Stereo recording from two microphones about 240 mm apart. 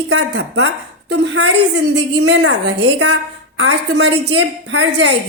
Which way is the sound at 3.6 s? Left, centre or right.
Right.